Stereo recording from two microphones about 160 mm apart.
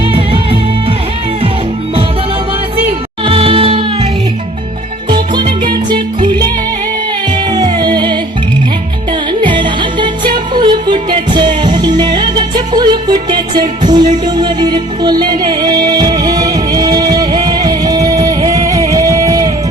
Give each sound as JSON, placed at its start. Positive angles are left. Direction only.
{"t": 0.1, "sound": "music", "side_deg": -35}
{"t": 3.2, "sound": "music", "side_deg": -35}
{"t": 5.1, "sound": "music", "side_deg": -30}
{"t": 7.5, "sound": "music", "side_deg": -25}
{"t": 9.4, "sound": "music", "side_deg": -30}